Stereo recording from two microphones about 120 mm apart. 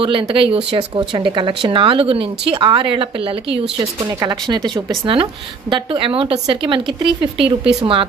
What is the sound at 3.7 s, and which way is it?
Speech, 30° right (ahead or behind).